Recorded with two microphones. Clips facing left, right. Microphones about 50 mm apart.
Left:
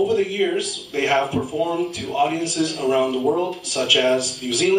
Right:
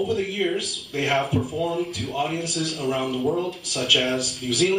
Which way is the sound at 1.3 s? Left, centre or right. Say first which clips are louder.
Left 3 dB; left.